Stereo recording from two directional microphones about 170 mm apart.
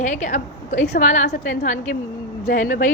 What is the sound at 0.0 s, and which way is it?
A woman's voice, 45° left (ahead or behind).